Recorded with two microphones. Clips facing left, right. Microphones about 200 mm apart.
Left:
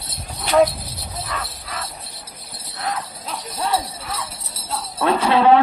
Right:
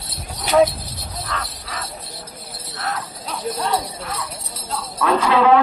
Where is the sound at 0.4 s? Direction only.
5° right (ahead or behind).